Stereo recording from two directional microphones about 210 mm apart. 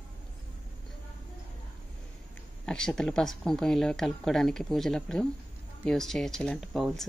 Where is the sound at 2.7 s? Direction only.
5° left (ahead or behind).